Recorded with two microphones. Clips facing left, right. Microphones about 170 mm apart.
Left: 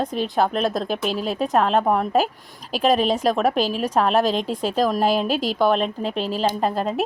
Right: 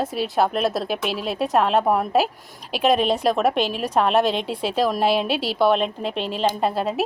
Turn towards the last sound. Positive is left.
turn(degrees=-5)  # may be behind; listen again after turning